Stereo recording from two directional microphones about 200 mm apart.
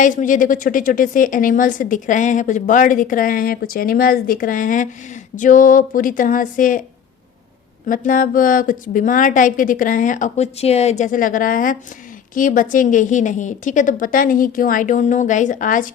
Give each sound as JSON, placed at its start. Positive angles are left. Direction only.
{"t": 0.0, "sound": "speech", "side_deg": 40}
{"t": 7.9, "sound": "speech", "side_deg": 40}